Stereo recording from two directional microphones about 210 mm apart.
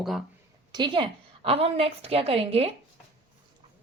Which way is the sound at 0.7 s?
20° right (ahead or behind).